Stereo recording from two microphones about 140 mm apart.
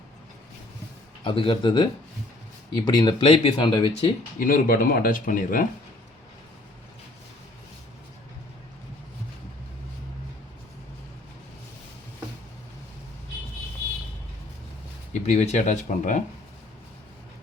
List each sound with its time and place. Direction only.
1.2 s speech: 35° left (ahead or behind)
4.4 s speech: 85° left
15.1 s speech: 55° left (ahead or behind)